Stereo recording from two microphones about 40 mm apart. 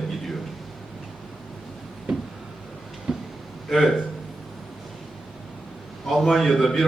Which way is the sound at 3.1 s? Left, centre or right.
Centre.